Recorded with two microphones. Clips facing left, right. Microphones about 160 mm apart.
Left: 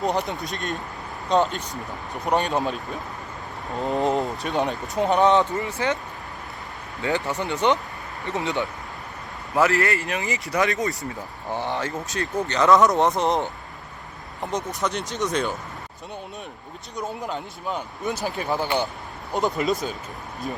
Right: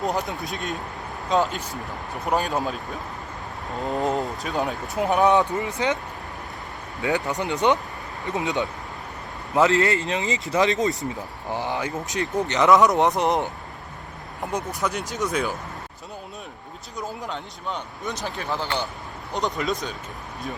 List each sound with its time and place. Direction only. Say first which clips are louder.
0.0 s speech: left 1 dB; centre (ahead or behind)
5.6 s speech: right 1 dB; 20° right (ahead or behind)
7.0 s speech: right 1 dB; 15° right (ahead or behind)
14.4 s speech: even; 5° right (ahead or behind)
17.0 s speech: left 2 dB; centre (ahead or behind)